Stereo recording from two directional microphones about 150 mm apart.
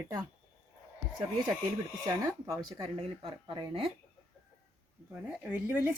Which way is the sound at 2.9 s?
35° right (ahead or behind).